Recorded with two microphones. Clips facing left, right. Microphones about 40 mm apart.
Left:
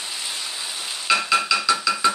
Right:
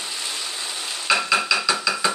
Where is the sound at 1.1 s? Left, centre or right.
Centre.